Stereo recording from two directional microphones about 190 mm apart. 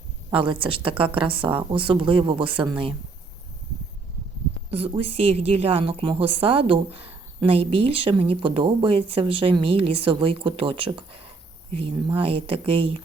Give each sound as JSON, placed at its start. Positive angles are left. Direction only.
{"t": 0.3, "sound": "a woman's voice", "side_deg": -25}
{"t": 4.7, "sound": "a woman's voice", "side_deg": -30}